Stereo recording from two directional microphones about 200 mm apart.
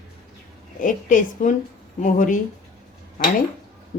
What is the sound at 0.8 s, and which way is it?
A woman's voice, 40° left (ahead or behind).